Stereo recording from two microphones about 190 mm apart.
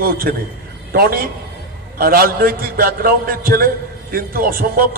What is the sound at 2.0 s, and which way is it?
A man's voice, 50° right (ahead or behind).